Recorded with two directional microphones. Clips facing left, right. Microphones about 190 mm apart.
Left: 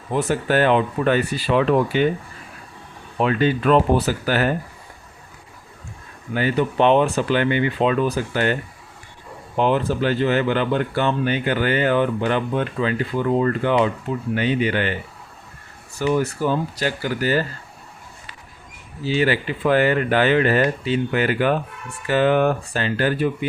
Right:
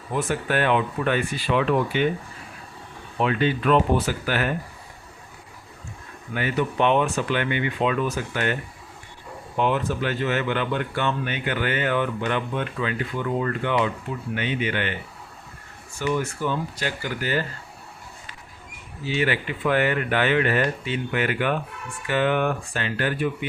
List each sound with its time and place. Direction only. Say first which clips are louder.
0.1 s speech: left 5 dB; 35° left (ahead or behind)
3.2 s speech: left 3 dB; 40° left (ahead or behind)
6.3 s speech: left 4 dB; 30° left (ahead or behind)
9.6 s speech: left 4 dB; 35° left (ahead or behind)
16.0 s speech: left 5 dB; 40° left (ahead or behind)
19.0 s speech: left 4 dB; 35° left (ahead or behind)